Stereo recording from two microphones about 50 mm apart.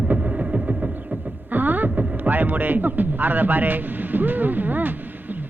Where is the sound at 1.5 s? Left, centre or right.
Right.